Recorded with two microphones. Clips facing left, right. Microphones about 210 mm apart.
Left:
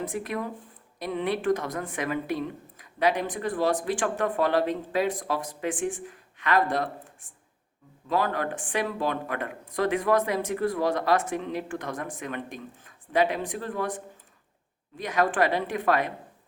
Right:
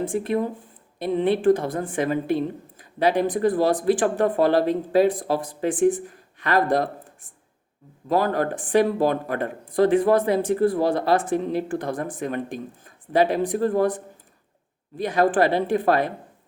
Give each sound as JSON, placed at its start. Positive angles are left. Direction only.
{"t": 0.0, "sound": "a woman's voice", "side_deg": -30}